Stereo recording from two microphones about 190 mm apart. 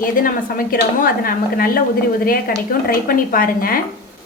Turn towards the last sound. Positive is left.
turn(degrees=50)  # may be behind; listen again after turning